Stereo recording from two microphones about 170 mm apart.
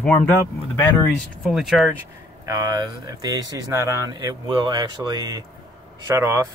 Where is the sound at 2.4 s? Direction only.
20° right (ahead or behind).